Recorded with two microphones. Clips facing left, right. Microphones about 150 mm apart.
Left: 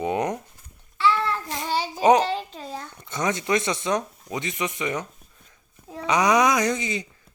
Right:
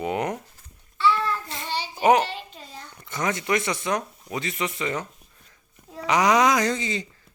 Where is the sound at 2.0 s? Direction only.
20° left (ahead or behind).